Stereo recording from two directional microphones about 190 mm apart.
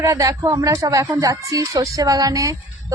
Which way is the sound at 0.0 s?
15° right (ahead or behind).